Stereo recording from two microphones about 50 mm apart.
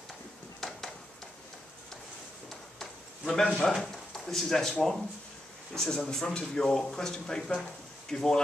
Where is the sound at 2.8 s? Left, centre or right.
Centre.